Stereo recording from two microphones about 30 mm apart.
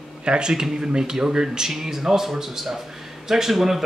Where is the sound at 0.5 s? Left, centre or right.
Right.